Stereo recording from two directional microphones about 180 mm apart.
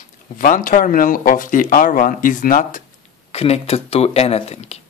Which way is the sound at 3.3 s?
35° left (ahead or behind).